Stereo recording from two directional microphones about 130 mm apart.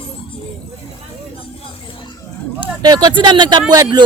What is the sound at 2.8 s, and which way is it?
Speech, 30° right (ahead or behind).